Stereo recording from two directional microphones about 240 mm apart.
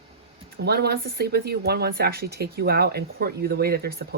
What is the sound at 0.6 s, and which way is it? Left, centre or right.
Speech, right.